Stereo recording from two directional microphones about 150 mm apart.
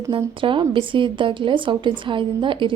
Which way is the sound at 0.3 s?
35° right (ahead or behind).